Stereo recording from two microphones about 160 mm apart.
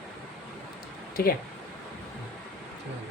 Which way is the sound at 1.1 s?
65° left (ahead or behind).